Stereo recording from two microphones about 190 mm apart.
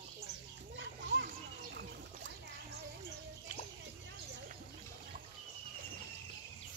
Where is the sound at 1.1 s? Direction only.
60° right (ahead or behind).